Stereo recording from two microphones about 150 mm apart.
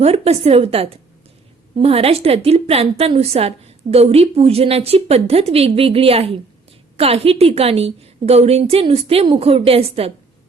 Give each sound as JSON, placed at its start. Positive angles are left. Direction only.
{"t": 0.0, "sound": "a woman's voice", "side_deg": -40}